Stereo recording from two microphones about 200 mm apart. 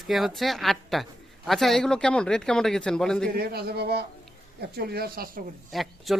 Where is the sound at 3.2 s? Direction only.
50° right (ahead or behind).